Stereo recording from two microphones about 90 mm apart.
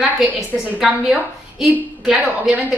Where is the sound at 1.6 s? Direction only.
5° right (ahead or behind).